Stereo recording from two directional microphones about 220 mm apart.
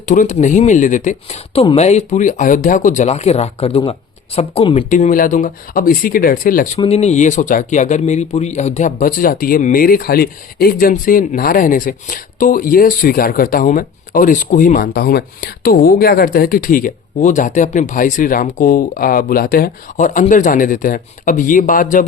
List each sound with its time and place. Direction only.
0.0 s speech: 35° left (ahead or behind)
6.7 s speech: 25° left (ahead or behind)